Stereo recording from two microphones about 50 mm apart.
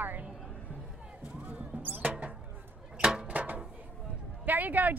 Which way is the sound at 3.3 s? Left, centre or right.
Right.